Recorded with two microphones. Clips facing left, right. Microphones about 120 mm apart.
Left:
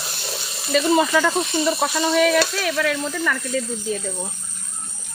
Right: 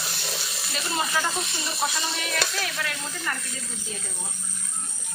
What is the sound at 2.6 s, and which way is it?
Speech, 90° left.